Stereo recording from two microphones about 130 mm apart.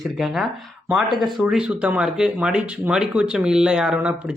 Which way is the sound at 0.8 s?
5° right (ahead or behind).